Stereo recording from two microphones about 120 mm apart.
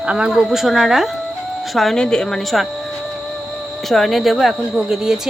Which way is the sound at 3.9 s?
Centre (ahead or behind).